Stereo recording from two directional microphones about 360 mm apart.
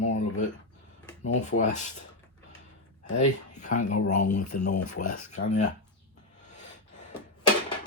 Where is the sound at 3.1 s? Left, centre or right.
Centre.